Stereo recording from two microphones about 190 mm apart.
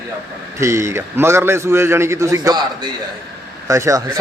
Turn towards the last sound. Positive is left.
turn(degrees=-15)  # may be behind; listen again after turning